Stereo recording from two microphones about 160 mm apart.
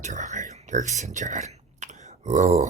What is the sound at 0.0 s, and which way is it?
Speech, 45° right (ahead or behind).